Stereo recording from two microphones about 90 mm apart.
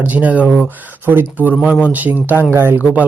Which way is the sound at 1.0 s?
25° right (ahead or behind).